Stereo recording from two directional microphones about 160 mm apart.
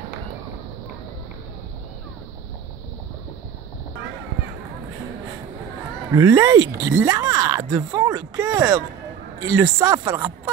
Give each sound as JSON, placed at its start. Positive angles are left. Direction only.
{"t": 6.1, "sound": "speech", "side_deg": -20}